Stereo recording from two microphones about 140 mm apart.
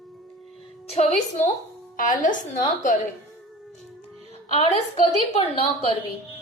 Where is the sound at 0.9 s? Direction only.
55° left (ahead or behind).